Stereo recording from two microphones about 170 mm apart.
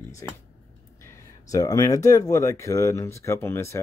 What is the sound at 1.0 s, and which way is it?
Speech, 20° left (ahead or behind).